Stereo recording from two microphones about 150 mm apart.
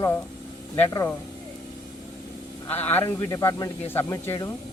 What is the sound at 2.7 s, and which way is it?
Speech, 15° left (ahead or behind).